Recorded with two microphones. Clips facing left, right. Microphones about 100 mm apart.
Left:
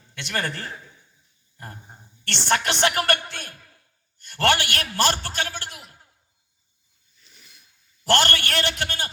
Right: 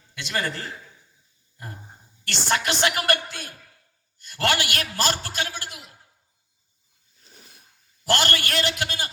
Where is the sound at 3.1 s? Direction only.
60° left (ahead or behind).